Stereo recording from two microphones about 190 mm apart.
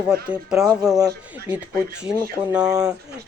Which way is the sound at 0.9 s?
15° right (ahead or behind).